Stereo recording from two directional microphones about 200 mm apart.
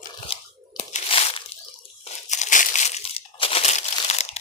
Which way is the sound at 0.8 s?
35° left (ahead or behind).